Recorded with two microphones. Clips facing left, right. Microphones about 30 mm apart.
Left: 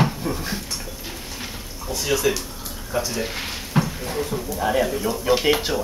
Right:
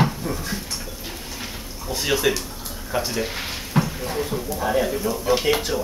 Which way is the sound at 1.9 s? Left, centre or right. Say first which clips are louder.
Even; right.